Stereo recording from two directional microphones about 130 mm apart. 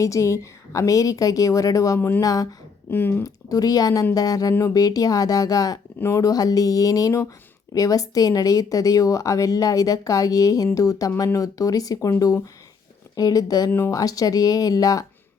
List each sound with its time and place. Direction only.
0.0 s speech: 25° left (ahead or behind)
2.0 s speech: 15° left (ahead or behind)
2.2 s speech: 30° left (ahead or behind)
2.9 s speech: 15° left (ahead or behind)
3.2 s speech: 30° left (ahead or behind)
13.1 s speech: 30° left (ahead or behind)